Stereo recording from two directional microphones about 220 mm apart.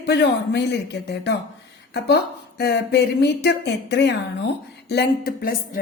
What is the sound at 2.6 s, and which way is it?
A woman's voice, 50° left (ahead or behind).